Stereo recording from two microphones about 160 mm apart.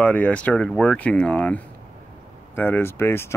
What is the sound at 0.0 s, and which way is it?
Speech, 10° left (ahead or behind).